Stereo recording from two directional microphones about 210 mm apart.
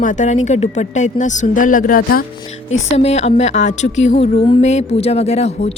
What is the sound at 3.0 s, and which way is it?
A woman's voice, 30° left (ahead or behind).